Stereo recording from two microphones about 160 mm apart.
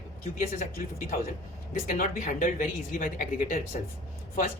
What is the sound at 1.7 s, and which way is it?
Speech, 50° left (ahead or behind).